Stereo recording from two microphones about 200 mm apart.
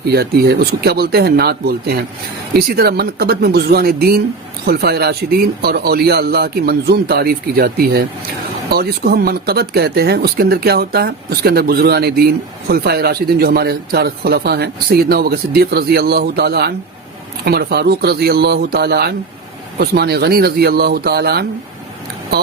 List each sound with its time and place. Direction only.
0.1 s speech: 50° right (ahead or behind)